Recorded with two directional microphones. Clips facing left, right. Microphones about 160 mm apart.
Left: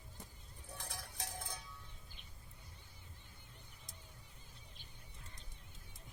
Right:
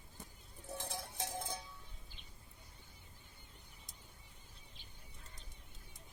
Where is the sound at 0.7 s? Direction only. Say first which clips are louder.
Right 5 dB; 25° right (ahead or behind).